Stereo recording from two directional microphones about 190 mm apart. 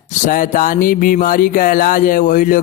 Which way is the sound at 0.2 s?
45° left (ahead or behind).